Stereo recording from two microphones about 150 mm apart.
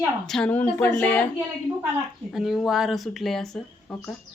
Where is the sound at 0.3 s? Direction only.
5° left (ahead or behind).